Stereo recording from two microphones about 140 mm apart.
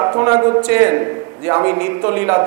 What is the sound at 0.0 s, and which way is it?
A man's voice, 20° right (ahead or behind).